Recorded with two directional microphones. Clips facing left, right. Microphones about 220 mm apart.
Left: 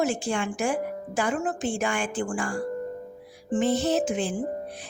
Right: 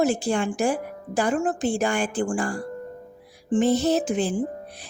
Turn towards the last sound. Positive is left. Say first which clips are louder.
# right 2 dB
turn(degrees=-35)  # may be behind; listen again after turning